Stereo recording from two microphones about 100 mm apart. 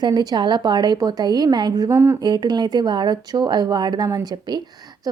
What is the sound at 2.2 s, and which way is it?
Speech, 45° right (ahead or behind).